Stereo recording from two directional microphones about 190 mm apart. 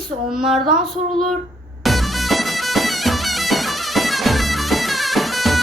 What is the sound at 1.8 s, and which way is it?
Music, centre (ahead or behind).